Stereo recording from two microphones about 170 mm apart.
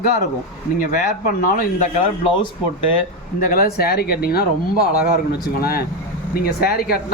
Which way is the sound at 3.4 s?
60° left (ahead or behind).